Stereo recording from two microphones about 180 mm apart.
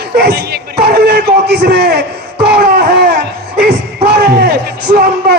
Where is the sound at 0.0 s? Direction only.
60° right (ahead or behind).